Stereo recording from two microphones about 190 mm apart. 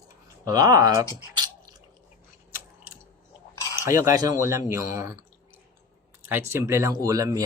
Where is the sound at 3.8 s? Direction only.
15° right (ahead or behind).